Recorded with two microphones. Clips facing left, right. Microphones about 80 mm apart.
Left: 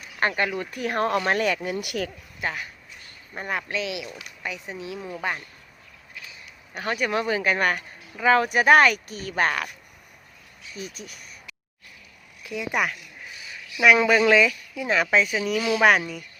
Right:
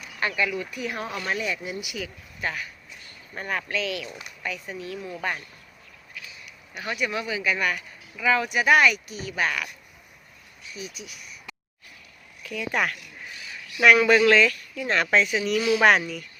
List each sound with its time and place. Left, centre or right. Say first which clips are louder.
0.2 s speech: left 2 dB; left
2.4 s a woman's voice: left 1 dB; left
6.4 s speech: left 5 dB; left
10.8 s speech: left 2 dB; left
12.4 s speech: left 1 dB; centre